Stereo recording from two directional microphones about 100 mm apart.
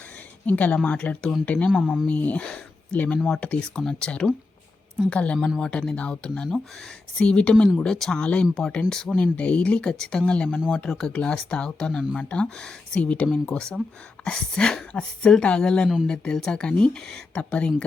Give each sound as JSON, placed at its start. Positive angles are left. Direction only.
{"t": 0.4, "sound": "speech", "side_deg": 15}